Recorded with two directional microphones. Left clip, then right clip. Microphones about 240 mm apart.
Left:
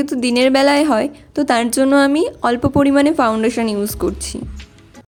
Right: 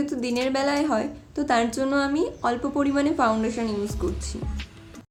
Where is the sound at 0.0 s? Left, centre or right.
Left.